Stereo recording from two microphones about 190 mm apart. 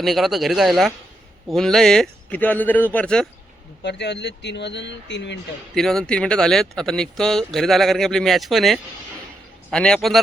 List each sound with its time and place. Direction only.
0.0 s speech: centre (ahead or behind)
3.8 s speech: 65° left (ahead or behind)
5.7 s speech: centre (ahead or behind)